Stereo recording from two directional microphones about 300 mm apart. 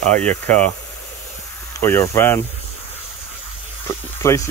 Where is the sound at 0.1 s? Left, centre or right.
Centre.